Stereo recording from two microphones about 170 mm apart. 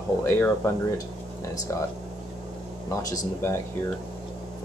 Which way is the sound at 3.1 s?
15° left (ahead or behind).